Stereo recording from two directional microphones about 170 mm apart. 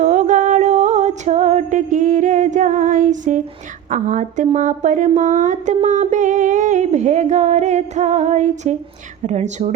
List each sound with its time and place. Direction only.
0.0 s music: 45° right (ahead or behind)
3.8 s speech: 45° right (ahead or behind)